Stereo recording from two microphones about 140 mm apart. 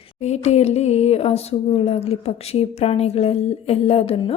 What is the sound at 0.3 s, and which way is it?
Speech, 50° left (ahead or behind).